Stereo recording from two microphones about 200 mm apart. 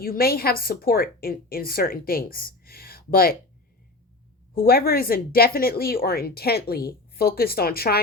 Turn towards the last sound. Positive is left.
turn(degrees=50)  # may be behind; listen again after turning